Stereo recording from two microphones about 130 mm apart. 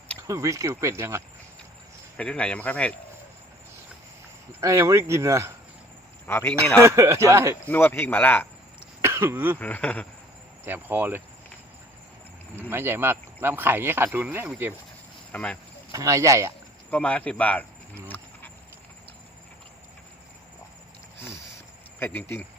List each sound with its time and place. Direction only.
0.2 s speech: 25° right (ahead or behind)
2.1 s speech: 10° left (ahead or behind)
4.6 s speech: 25° right (ahead or behind)
6.2 s speech: 15° left (ahead or behind)
6.7 s speech: 25° right (ahead or behind)
7.6 s speech: 15° left (ahead or behind)
9.0 s cough: 20° right (ahead or behind)
9.6 s speech: 10° left (ahead or behind)
10.7 s speech: 15° right (ahead or behind)
12.5 s speech: 15° right (ahead or behind)
15.3 s speech: 10° left (ahead or behind)
15.9 s speech: 25° right (ahead or behind)
16.9 s speech: 10° left (ahead or behind)
21.9 s speech: 15° left (ahead or behind)